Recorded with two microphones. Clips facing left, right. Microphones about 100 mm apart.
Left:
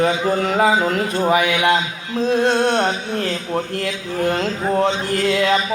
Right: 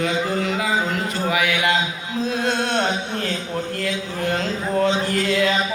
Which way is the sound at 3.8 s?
50° left (ahead or behind).